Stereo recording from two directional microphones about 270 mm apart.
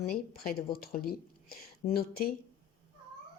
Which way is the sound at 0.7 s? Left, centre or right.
Left.